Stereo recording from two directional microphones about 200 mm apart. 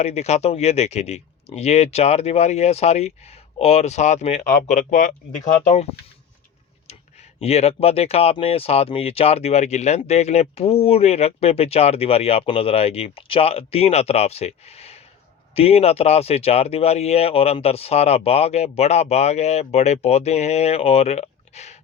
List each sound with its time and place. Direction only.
0.0 s speech: 35° left (ahead or behind)
7.3 s speech: 30° left (ahead or behind)